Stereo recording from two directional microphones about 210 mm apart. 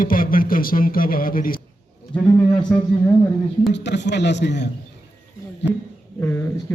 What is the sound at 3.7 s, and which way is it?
A man's voice, 55° left (ahead or behind).